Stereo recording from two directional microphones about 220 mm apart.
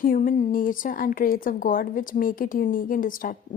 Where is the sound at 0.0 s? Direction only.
40° left (ahead or behind).